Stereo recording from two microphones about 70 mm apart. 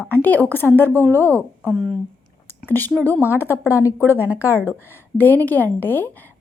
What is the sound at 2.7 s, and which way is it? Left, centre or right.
Speech, left.